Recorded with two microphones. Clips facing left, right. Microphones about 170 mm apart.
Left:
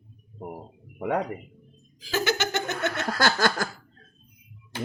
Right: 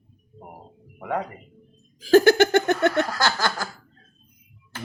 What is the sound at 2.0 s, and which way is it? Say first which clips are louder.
Laughter: right 12 dB; 50° right (ahead or behind).